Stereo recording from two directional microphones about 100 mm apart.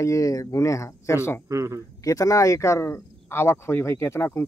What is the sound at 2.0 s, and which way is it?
Speech, 35° left (ahead or behind).